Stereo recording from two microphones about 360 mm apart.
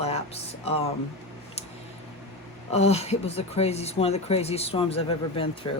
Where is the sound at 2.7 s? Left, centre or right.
Centre.